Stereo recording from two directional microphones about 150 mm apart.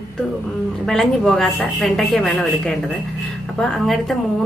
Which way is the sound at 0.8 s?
5° left (ahead or behind).